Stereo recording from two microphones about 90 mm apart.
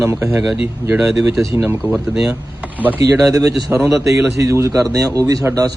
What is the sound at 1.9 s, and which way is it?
Speech, 10° right (ahead or behind).